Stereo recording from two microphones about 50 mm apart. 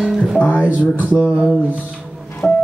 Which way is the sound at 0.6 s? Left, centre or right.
Right.